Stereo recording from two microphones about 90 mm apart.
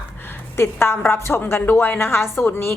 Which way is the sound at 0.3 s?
25° left (ahead or behind).